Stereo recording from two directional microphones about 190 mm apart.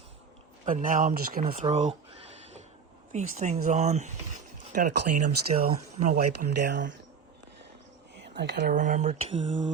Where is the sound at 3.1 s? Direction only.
40° right (ahead or behind); by 6.9 s 65° right (ahead or behind).